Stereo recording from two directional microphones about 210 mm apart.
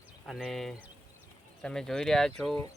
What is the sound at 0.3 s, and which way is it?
Speech, centre (ahead or behind).